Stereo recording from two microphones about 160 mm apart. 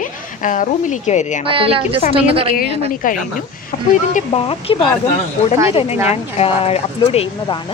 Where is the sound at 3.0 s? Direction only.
55° left (ahead or behind).